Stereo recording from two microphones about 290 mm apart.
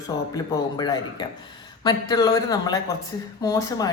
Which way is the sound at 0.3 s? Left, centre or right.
Centre.